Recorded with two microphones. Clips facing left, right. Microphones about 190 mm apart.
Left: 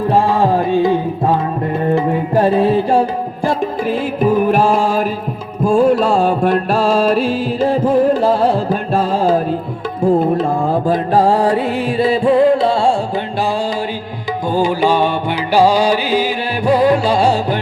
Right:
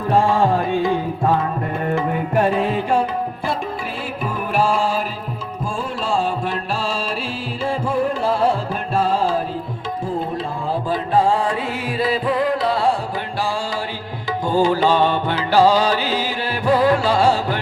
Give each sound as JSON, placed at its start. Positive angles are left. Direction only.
{"t": 0.2, "sound": "music", "side_deg": 35}
{"t": 1.8, "sound": "music", "side_deg": 25}
{"t": 5.6, "sound": "music", "side_deg": 65}
{"t": 7.6, "sound": "music", "side_deg": 40}
{"t": 14.5, "sound": "music", "side_deg": 15}